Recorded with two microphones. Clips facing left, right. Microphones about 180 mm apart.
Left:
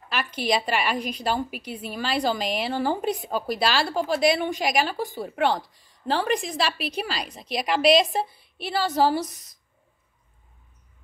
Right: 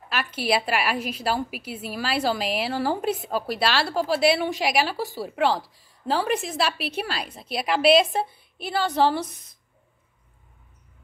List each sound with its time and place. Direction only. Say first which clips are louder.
0.1 s a woman's voice: even; centre (ahead or behind)